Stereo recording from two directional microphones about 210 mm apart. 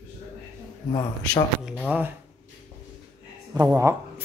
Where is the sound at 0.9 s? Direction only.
20° left (ahead or behind).